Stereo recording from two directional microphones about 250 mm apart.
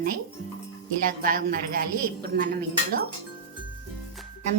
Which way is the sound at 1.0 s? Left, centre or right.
Right.